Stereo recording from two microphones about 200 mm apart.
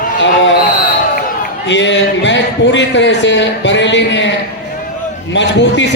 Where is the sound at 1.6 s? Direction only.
65° left (ahead or behind).